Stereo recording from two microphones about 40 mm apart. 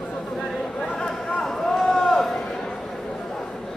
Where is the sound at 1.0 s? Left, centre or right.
Centre.